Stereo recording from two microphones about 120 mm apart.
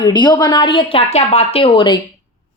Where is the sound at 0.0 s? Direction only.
35° left (ahead or behind).